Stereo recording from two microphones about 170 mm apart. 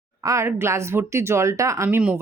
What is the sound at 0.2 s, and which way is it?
Speech, 20° right (ahead or behind).